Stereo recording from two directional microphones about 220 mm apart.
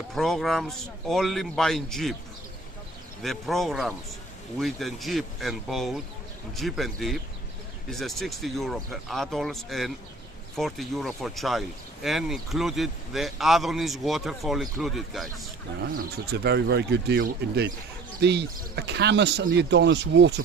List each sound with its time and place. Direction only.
0.1 s speech: centre (ahead or behind)
3.2 s speech: centre (ahead or behind)
16.3 s speech: 50° right (ahead or behind)